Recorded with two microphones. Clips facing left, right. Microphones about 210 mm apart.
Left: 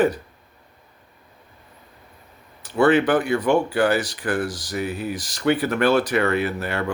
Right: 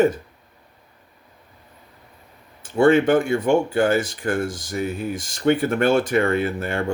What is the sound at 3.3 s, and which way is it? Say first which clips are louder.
Speech: right 1 dB; 25° right (ahead or behind).